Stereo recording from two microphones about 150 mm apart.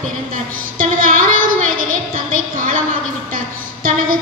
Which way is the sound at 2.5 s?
60° right (ahead or behind).